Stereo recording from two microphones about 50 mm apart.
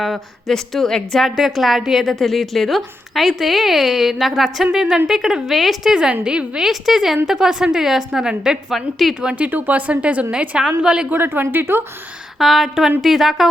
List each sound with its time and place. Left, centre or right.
0.0 s a woman's voice: centre
1.4 s a woman's voice: centre
5.9 s a woman's voice: centre
6.7 s a woman's voice: centre
8.7 s a woman's voice: centre
9.2 s speech: right
10.6 s a woman's voice: centre
11.1 s speech: right
12.4 s a woman's voice: centre